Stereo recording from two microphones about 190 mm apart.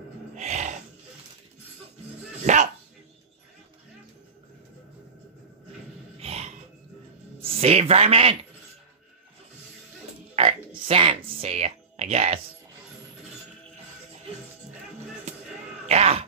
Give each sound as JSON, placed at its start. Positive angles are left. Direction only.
{"t": 0.4, "sound": "wild animals", "side_deg": -40}
{"t": 2.4, "sound": "dog", "side_deg": -40}
{"t": 6.1, "sound": "grunt", "side_deg": -35}
{"t": 7.4, "sound": "speech", "side_deg": -30}
{"t": 10.3, "sound": "a sound", "side_deg": -30}
{"t": 15.9, "sound": "a sound", "side_deg": -35}